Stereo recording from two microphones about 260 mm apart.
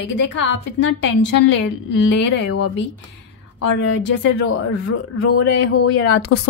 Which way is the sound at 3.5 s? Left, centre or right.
Left.